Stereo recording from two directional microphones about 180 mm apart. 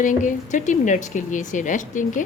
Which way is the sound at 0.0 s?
45° left (ahead or behind).